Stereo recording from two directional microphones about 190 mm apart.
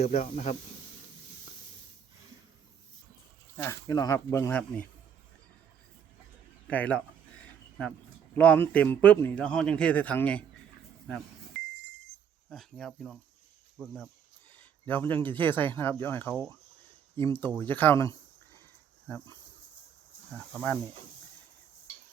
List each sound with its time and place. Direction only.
0.0 s speech: 35° left (ahead or behind)
3.6 s a man's voice: 15° left (ahead or behind)
6.7 s a sound: 10° left (ahead or behind)
8.4 s a man's voice: 10° left (ahead or behind)
12.5 s speech: centre (ahead or behind)
14.6 s a man's voice: 10° left (ahead or behind)